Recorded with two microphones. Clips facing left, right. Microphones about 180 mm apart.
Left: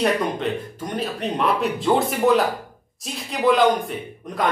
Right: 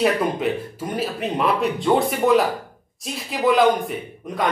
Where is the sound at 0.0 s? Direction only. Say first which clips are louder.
Right 2 dB; 5° right (ahead or behind).